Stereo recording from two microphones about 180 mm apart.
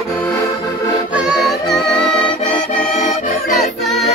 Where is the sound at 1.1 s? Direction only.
5° right (ahead or behind).